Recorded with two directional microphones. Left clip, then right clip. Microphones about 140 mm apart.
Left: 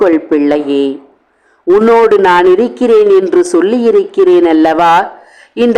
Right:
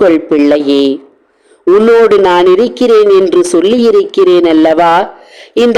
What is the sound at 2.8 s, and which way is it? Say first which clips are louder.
Speech: right 1 dB; 25° right (ahead or behind).